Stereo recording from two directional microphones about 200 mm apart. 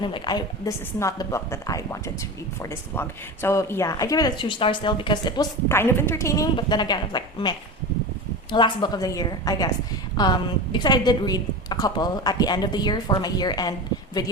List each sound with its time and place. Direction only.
0.0 s a woman's voice: 20° left (ahead or behind)